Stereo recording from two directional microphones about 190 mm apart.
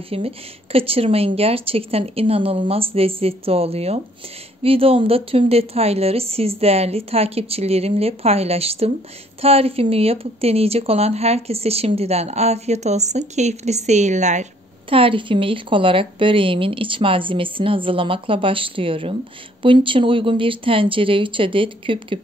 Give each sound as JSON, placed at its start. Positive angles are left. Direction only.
{"t": 0.1, "sound": "speech", "side_deg": -30}